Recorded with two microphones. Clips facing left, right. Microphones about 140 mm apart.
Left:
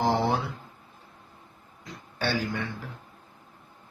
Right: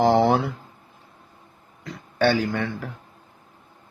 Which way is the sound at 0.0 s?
70° right (ahead or behind).